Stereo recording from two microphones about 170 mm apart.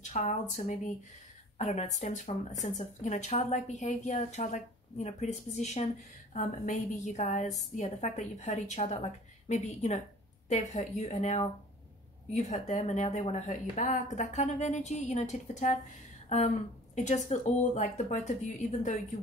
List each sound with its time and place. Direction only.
0.0 s speech: 45° left (ahead or behind)